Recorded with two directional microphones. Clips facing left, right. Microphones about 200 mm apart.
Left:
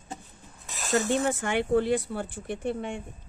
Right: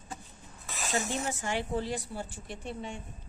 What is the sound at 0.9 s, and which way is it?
Speech, 60° left (ahead or behind).